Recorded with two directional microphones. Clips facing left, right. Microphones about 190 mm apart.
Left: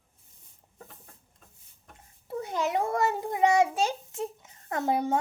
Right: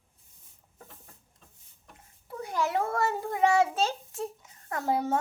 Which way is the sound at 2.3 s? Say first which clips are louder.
Left 1 dB; 20° left (ahead or behind).